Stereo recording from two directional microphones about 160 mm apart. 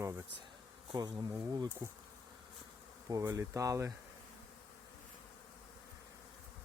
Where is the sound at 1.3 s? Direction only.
20° right (ahead or behind).